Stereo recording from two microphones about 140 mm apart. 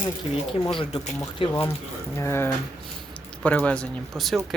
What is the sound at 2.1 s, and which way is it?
Speech, 20° left (ahead or behind).